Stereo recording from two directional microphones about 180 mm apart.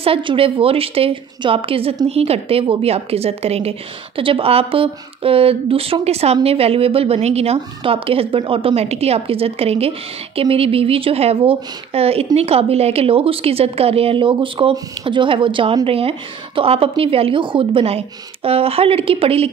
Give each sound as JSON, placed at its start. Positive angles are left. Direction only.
{"t": 0.0, "sound": "a woman's voice", "side_deg": -30}